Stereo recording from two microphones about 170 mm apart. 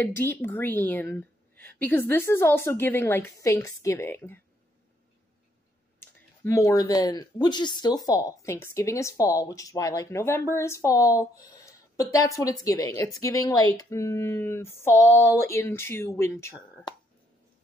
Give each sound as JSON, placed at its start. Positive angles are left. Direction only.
{"t": 0.0, "sound": "speech", "side_deg": 10}
{"t": 5.9, "sound": "speech", "side_deg": 15}